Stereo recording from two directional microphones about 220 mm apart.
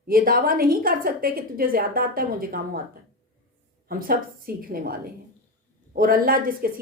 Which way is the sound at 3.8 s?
40° right (ahead or behind).